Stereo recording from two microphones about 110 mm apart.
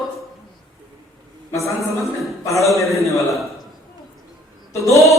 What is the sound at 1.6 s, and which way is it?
Speech, 25° left (ahead or behind).